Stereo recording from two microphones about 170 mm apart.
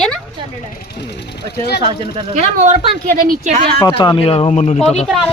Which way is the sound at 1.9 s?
35° right (ahead or behind).